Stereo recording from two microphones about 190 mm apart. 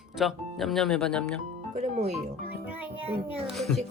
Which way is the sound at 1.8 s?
35° right (ahead or behind).